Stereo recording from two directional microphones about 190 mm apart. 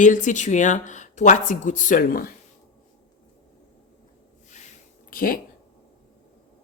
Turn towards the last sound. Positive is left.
turn(degrees=45)  # may be behind; listen again after turning